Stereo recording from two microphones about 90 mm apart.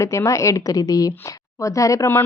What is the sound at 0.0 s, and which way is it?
A woman's voice, 35° left (ahead or behind).